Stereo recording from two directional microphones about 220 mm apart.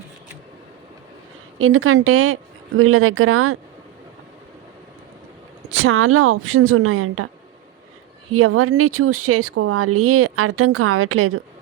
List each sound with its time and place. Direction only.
1.5 s speech: 70° right (ahead or behind)
5.7 s speech: 65° right (ahead or behind)
8.3 s speech: 80° right